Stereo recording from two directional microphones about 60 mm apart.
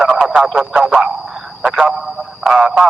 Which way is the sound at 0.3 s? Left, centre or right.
Centre.